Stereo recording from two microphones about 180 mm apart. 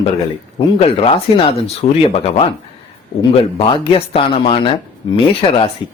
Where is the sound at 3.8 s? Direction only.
30° left (ahead or behind).